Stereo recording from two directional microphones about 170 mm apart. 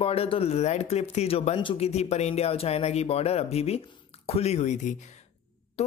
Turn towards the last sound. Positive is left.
turn(degrees=40)  # may be behind; listen again after turning